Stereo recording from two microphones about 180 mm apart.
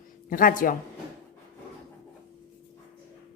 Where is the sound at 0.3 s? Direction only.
50° left (ahead or behind).